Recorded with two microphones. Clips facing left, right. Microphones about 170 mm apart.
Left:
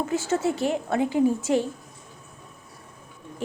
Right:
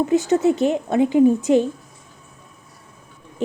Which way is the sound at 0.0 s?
20° right (ahead or behind).